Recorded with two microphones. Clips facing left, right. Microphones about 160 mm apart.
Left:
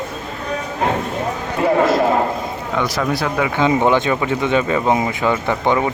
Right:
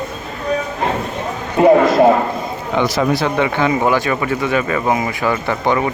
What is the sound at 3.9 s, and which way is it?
Speech, 20° left (ahead or behind).